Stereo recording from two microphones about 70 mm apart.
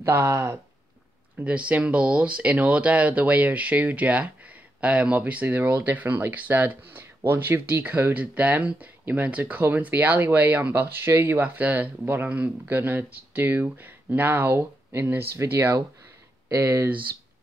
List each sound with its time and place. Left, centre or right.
0.0 s speech: right
1.4 s speech: centre